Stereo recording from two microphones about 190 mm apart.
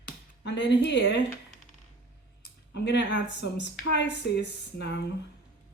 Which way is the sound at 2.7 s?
65° left (ahead or behind).